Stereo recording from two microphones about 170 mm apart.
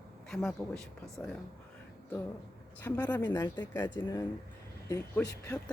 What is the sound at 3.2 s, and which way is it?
Speech, 25° left (ahead or behind).